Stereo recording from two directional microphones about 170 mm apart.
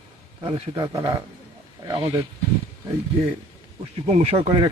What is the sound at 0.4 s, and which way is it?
Speech, 30° right (ahead or behind).